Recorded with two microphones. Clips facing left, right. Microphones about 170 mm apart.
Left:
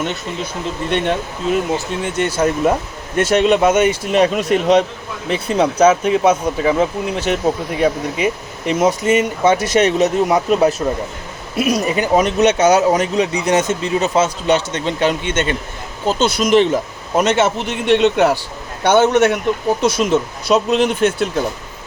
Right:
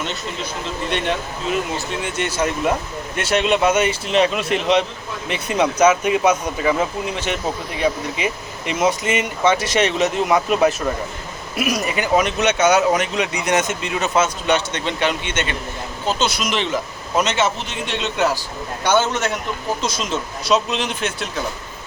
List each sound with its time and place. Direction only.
0.9 s speech: 50° left (ahead or behind)
2.1 s speech: 45° left (ahead or behind)
7.2 s a man's voice: 45° left (ahead or behind)